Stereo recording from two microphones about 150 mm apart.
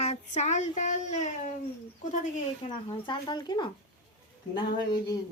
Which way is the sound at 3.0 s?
30° left (ahead or behind).